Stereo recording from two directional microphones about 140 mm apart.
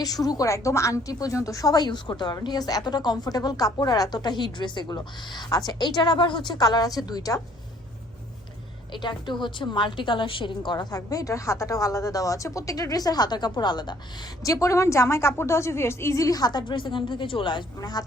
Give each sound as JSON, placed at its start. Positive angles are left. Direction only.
{"t": 0.0, "sound": "a woman's voice", "side_deg": 25}
{"t": 8.9, "sound": "a woman's voice", "side_deg": 35}